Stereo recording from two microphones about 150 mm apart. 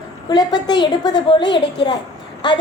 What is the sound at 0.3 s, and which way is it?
A woman's voice, 30° left (ahead or behind).